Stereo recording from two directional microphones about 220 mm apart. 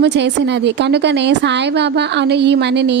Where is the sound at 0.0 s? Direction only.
50° right (ahead or behind).